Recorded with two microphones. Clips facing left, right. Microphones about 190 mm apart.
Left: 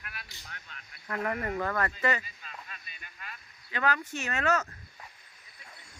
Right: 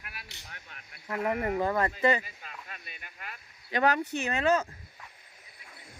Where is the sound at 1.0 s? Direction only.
15° right (ahead or behind).